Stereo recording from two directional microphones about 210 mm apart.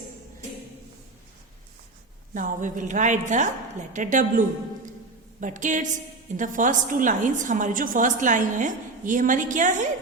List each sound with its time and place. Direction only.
2.3 s a woman's voice: 40° right (ahead or behind)